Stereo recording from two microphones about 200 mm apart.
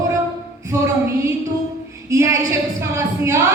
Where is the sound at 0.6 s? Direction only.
15° right (ahead or behind).